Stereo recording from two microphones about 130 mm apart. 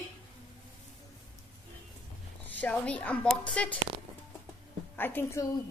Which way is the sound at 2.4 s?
10° left (ahead or behind).